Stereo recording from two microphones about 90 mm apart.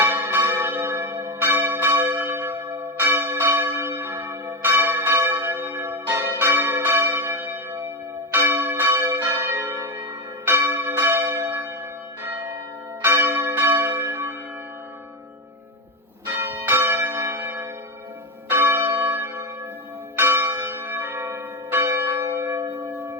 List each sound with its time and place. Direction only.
0.0 s church bell: 25° right (ahead or behind)
0.8 s church bell: 35° right (ahead or behind)
1.4 s church bell: 25° right (ahead or behind)
13.0 s church bell: 25° right (ahead or behind)
16.2 s church bell: 20° right (ahead or behind)